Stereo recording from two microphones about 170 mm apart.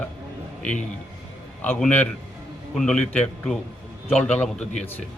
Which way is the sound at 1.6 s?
10° left (ahead or behind).